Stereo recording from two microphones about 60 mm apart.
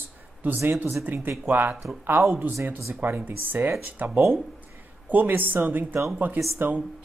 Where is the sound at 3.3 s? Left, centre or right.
Right.